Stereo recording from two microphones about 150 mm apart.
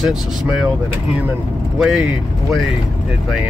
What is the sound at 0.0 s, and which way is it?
Speech, 5° right (ahead or behind).